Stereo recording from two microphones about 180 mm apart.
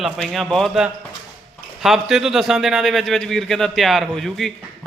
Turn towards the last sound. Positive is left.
turn(degrees=0)  # may be behind; listen again after turning